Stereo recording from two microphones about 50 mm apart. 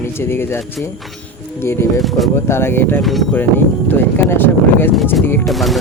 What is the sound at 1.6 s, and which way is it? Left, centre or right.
Speech, left.